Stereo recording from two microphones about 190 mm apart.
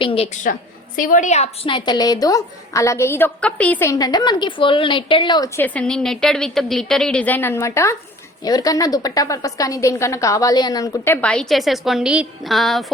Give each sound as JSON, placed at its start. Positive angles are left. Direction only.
{"t": 0.0, "sound": "a woman's voice", "side_deg": 30}
{"t": 0.9, "sound": "a woman's voice", "side_deg": 45}
{"t": 5.6, "sound": "a woman's voice", "side_deg": 5}